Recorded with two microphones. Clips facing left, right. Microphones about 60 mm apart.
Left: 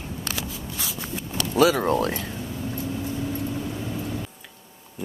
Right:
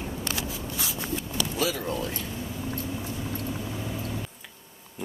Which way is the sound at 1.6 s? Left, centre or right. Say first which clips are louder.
Left 11 dB; left.